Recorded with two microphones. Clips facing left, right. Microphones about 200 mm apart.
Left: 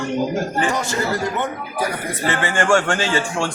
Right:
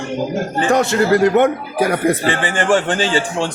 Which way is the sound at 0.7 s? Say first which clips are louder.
Right 8 dB; 65° right (ahead or behind).